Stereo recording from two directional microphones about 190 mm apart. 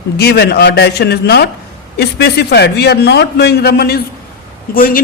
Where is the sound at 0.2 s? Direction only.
60° left (ahead or behind).